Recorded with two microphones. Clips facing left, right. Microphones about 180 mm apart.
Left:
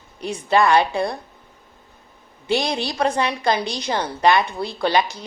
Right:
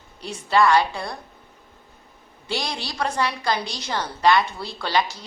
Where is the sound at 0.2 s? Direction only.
20° left (ahead or behind).